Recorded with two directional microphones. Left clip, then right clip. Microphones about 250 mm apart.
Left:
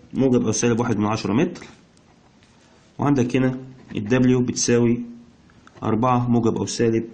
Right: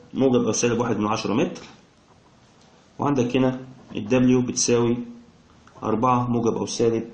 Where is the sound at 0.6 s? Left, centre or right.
Left.